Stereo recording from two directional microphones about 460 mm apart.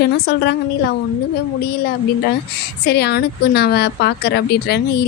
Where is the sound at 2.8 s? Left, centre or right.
Left.